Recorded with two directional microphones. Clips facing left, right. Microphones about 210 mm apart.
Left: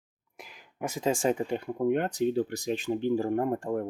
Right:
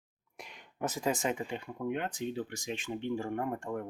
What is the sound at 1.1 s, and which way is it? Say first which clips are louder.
Speech: left 7 dB; 35° left (ahead or behind).